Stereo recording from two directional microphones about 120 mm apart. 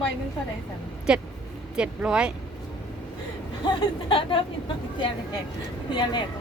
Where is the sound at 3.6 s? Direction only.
45° left (ahead or behind).